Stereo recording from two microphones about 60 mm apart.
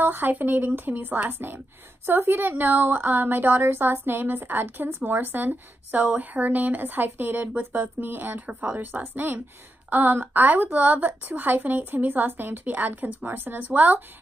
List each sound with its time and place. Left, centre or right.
0.0 s a woman's voice: right